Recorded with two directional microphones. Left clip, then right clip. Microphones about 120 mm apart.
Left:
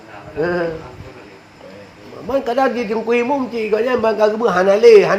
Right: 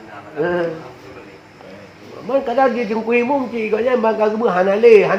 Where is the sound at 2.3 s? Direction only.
90° left.